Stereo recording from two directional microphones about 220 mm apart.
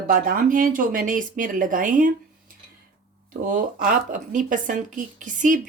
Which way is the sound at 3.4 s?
35° right (ahead or behind).